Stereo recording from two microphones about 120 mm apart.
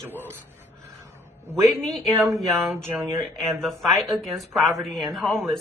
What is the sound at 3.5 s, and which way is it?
Speech, centre (ahead or behind).